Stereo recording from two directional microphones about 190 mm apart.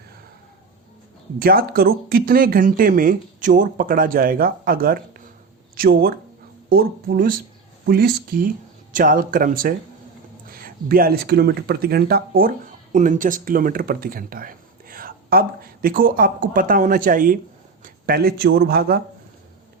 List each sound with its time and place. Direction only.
1.4 s speech: 50° right (ahead or behind)